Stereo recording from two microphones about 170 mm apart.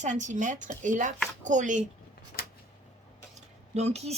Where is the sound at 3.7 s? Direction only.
40° right (ahead or behind).